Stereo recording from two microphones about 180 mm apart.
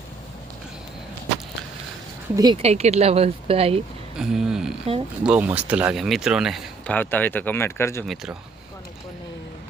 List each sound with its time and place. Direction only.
2.3 s speech: 25° right (ahead or behind)
4.2 s speech: 5° right (ahead or behind)
6.9 s speech: 10° left (ahead or behind)
8.0 s speech: centre (ahead or behind)